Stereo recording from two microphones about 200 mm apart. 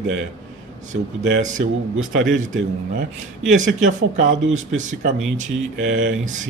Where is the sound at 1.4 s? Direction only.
40° right (ahead or behind).